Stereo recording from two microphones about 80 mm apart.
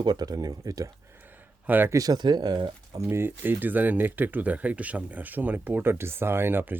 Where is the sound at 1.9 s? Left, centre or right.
Right.